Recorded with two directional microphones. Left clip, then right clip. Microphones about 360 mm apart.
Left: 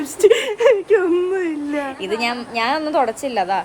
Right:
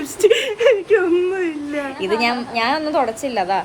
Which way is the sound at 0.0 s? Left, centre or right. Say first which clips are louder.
Left 1 dB; left.